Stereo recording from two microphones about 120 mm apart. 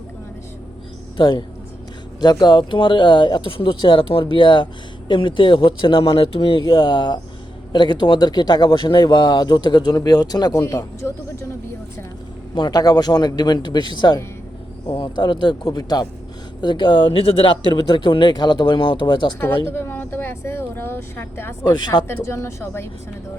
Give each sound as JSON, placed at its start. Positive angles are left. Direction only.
{"t": 1.1, "sound": "speech", "side_deg": 40}
{"t": 10.6, "sound": "speech", "side_deg": 25}
{"t": 12.5, "sound": "speech", "side_deg": 35}
{"t": 19.6, "sound": "speech", "side_deg": 20}
{"t": 21.6, "sound": "speech", "side_deg": 35}
{"t": 22.0, "sound": "speech", "side_deg": 25}